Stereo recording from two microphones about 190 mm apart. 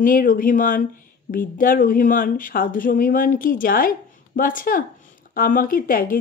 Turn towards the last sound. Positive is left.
turn(degrees=50)  # may be behind; listen again after turning